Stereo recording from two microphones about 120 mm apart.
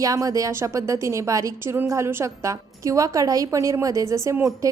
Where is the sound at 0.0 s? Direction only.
30° right (ahead or behind).